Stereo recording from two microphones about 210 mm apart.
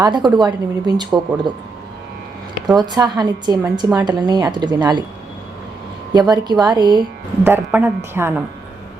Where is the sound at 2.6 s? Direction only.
20° right (ahead or behind).